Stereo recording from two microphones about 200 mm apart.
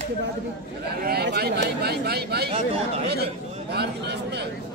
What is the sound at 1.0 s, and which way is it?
Speech, 55° right (ahead or behind).